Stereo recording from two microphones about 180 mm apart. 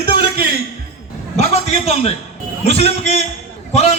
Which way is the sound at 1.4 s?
35° left (ahead or behind).